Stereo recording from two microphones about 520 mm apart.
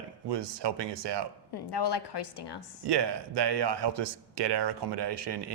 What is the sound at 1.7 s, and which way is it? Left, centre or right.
Speech, left.